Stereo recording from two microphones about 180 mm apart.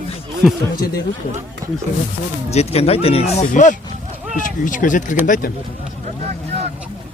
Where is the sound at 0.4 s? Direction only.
Centre (ahead or behind).